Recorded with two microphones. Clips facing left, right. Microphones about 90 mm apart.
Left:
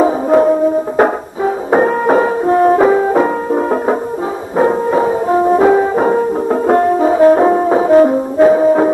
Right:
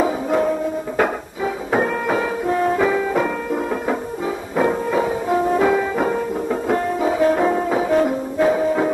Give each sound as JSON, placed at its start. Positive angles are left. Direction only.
{"t": 0.0, "sound": "music", "side_deg": 35}
{"t": 0.9, "sound": "french horn", "side_deg": 40}
{"t": 4.6, "sound": "music", "side_deg": 35}